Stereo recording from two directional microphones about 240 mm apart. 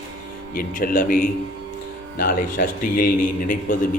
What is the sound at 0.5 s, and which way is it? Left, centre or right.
A man's voice, left.